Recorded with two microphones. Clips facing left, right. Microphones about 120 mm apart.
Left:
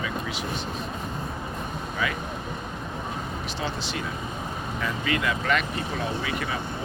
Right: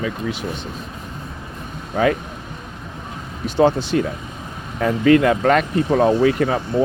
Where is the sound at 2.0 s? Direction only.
50° right (ahead or behind).